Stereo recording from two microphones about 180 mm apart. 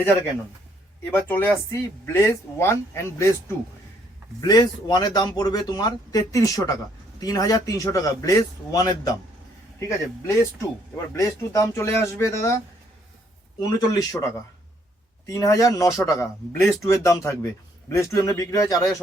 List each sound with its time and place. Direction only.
1.1 s speech: 10° left (ahead or behind)
4.4 s speech: 20° left (ahead or behind)
10.2 s speech: 15° left (ahead or behind)
13.6 s speech: 20° left (ahead or behind)